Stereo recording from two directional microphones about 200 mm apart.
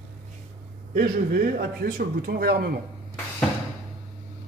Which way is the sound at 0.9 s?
50° right (ahead or behind).